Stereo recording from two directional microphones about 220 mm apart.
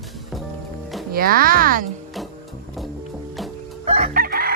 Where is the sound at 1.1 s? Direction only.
40° right (ahead or behind).